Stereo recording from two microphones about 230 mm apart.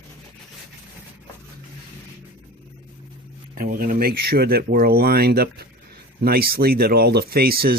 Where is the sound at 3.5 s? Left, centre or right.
Right.